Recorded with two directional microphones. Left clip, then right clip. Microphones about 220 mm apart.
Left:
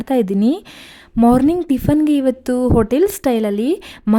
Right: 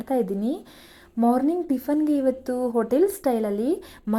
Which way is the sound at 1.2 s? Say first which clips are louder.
Left 8 dB; 35° left (ahead or behind).